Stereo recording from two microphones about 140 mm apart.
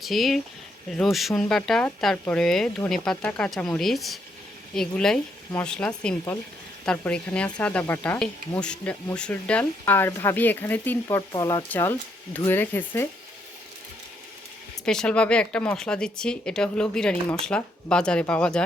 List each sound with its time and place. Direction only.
0.0 s speech: centre (ahead or behind)
11.3 s speech: 25° left (ahead or behind)
11.7 s speech: 15° left (ahead or behind)
14.8 s speech: 5° left (ahead or behind)